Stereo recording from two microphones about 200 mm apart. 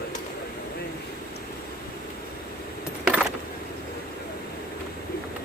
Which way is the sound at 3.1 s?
5° right (ahead or behind).